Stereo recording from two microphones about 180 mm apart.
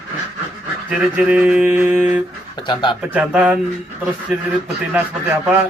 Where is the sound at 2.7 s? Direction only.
25° left (ahead or behind).